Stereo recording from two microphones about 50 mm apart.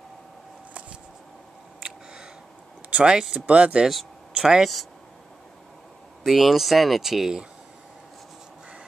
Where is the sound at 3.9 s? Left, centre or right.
Centre.